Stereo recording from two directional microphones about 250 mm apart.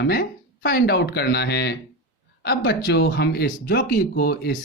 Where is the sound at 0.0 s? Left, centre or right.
Left.